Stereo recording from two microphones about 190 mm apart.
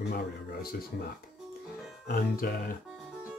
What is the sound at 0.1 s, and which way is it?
Speech, 50° left (ahead or behind).